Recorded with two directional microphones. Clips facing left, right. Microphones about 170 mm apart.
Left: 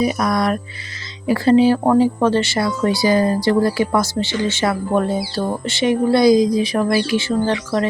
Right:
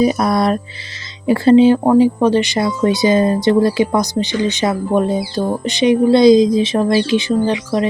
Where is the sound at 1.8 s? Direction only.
15° right (ahead or behind).